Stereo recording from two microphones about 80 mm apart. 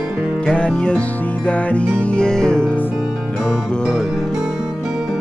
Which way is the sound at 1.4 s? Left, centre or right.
Centre.